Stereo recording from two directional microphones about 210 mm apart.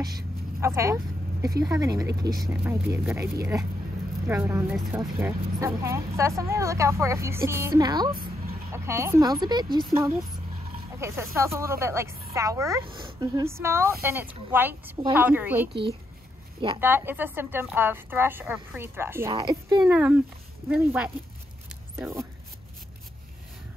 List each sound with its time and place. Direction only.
0.0 s vehicle: 15° right (ahead or behind)
1.6 s speech: 15° right (ahead or behind)
4.3 s speech: 10° right (ahead or behind)
16.8 s speech: 10° right (ahead or behind)
19.8 s speech: 5° right (ahead or behind)